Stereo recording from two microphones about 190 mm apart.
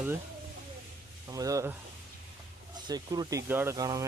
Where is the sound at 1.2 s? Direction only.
20° right (ahead or behind).